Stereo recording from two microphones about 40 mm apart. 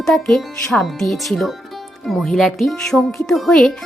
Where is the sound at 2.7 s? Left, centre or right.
Centre.